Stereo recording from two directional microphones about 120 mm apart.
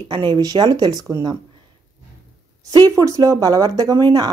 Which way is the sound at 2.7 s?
30° right (ahead or behind).